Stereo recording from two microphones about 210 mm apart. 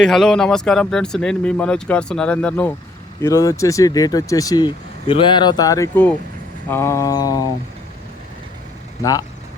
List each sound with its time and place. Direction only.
0.0 s speech: centre (ahead or behind); by 7.4 s 20° left (ahead or behind)